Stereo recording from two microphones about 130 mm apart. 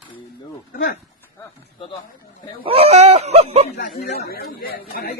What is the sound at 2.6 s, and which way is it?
A man's voice, 50° right (ahead or behind).